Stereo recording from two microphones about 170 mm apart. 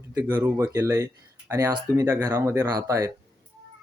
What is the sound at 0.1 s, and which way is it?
Speech, 15° right (ahead or behind).